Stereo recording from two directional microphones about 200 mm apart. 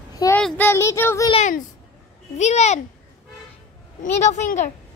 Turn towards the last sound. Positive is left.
turn(degrees=40)  # may be behind; listen again after turning